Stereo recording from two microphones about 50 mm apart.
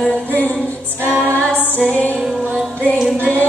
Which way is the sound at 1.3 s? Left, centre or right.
Left.